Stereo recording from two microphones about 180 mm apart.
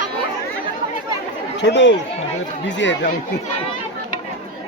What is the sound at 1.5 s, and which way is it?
Speech, 75° left (ahead or behind).